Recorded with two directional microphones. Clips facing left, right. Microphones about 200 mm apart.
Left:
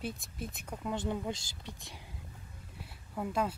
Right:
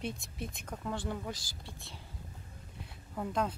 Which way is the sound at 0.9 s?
20° left (ahead or behind).